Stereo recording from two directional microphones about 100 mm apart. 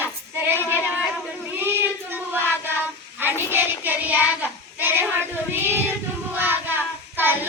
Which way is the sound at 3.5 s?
20° right (ahead or behind).